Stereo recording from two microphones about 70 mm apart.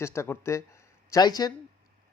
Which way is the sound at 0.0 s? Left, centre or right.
Left.